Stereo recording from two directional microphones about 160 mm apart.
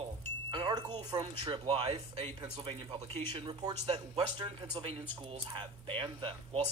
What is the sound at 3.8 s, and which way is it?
Speech, 40° right (ahead or behind).